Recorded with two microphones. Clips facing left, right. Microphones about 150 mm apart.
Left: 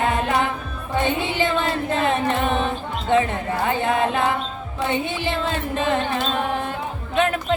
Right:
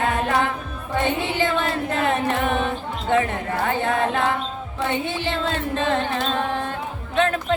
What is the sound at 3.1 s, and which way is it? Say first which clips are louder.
Carnatic music: left 1 dB; 20° left (ahead or behind).